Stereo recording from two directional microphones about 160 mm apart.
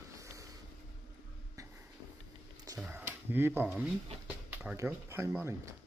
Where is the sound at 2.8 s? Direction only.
10° right (ahead or behind).